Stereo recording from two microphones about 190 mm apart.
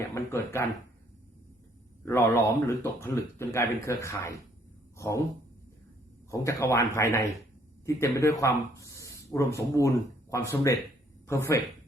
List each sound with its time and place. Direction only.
0.1 s speech: 15° left (ahead or behind)
2.0 s speech: 15° left (ahead or behind)
6.3 s speech: 15° left (ahead or behind)